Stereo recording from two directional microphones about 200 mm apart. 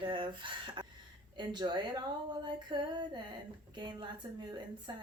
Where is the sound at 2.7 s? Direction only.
20° right (ahead or behind).